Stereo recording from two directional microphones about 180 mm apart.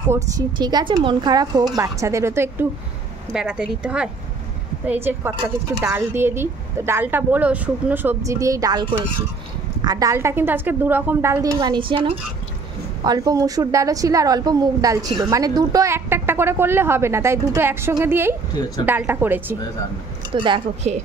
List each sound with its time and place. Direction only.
0.1 s a woman's voice: 20° right (ahead or behind)
20.3 s a woman's voice: 30° right (ahead or behind)